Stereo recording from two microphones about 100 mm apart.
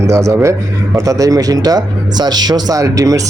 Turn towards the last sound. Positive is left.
turn(degrees=-35)  # may be behind; listen again after turning